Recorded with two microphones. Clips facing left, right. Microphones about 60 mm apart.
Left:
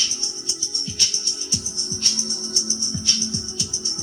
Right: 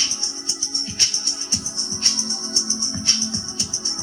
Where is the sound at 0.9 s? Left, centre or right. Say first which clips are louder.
Even; right.